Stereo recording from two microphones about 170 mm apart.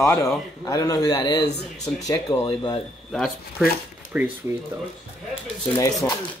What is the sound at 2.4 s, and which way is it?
Speech, 35° left (ahead or behind).